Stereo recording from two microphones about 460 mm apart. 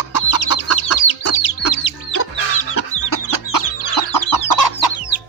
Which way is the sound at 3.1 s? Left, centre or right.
Left.